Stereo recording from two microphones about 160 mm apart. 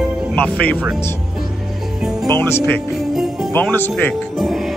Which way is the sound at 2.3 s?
15° left (ahead or behind).